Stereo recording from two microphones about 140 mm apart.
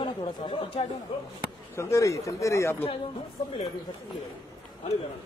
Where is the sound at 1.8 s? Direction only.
20° left (ahead or behind).